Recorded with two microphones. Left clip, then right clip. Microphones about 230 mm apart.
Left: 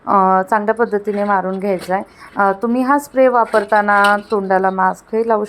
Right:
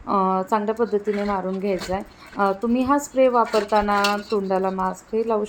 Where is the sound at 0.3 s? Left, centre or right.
Centre.